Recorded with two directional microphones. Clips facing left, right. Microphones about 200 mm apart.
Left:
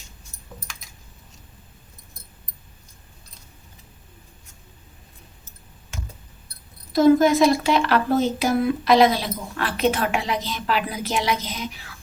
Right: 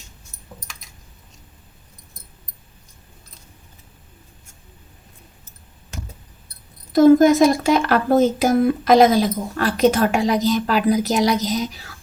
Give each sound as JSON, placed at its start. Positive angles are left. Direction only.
{"t": 6.9, "sound": "a woman's voice", "side_deg": -45}